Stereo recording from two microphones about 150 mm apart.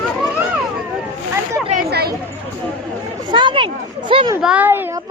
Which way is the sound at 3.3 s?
30° right (ahead or behind).